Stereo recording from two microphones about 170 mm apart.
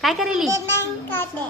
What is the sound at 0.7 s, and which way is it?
Speech, 15° left (ahead or behind).